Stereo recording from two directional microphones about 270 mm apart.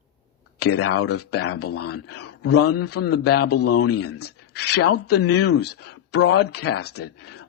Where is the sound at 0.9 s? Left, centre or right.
Left.